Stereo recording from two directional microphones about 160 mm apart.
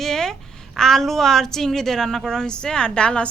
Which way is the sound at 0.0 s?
5° left (ahead or behind).